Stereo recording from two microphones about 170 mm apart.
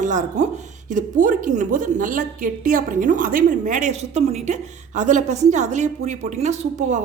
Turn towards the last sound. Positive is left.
turn(degrees=-45)  # may be behind; listen again after turning